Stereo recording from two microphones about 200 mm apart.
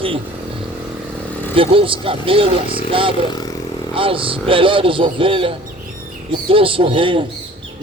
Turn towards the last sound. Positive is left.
turn(degrees=-25)  # may be behind; listen again after turning